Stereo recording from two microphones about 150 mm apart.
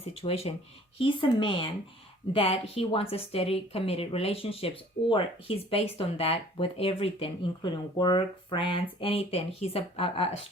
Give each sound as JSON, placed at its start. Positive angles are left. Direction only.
{"t": 0.0, "sound": "a woman's voice", "side_deg": 40}